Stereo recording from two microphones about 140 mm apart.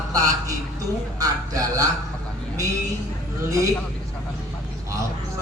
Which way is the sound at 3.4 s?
25° right (ahead or behind).